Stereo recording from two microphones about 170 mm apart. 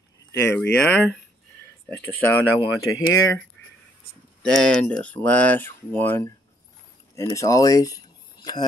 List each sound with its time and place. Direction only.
0.3 s speech: 15° left (ahead or behind)
4.4 s speech: 5° left (ahead or behind); by 8.6 s 25° left (ahead or behind)